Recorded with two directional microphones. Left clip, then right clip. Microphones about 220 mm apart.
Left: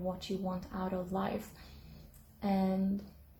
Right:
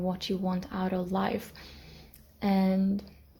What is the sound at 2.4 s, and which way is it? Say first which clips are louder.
Speech: right 5 dB; 45° right (ahead or behind).